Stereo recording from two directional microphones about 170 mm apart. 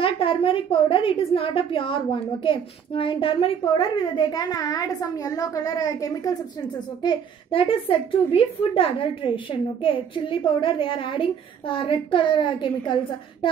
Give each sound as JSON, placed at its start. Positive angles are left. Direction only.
{"t": 0.0, "sound": "a woman's voice", "side_deg": 30}